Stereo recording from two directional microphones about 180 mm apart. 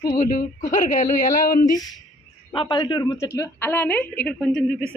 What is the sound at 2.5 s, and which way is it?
A man's voice, 25° left (ahead or behind).